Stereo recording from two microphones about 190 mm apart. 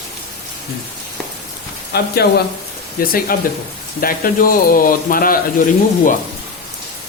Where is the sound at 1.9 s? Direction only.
55° left (ahead or behind).